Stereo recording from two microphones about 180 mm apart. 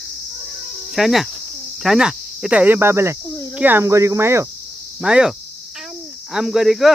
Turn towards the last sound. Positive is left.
turn(degrees=0)  # may be behind; listen again after turning